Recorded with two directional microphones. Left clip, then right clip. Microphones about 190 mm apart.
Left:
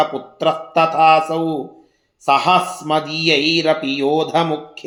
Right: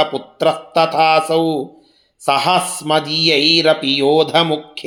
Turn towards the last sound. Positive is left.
turn(degrees=-25)  # may be behind; listen again after turning